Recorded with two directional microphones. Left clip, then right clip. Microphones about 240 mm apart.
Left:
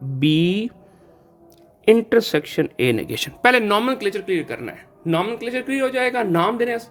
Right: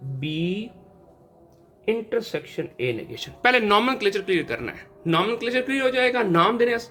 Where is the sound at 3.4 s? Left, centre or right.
Left.